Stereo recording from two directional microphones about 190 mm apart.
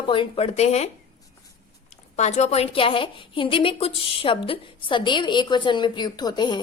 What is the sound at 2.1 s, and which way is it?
A woman's voice, 35° left (ahead or behind).